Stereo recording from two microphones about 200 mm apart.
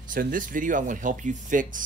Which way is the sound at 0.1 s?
45° right (ahead or behind).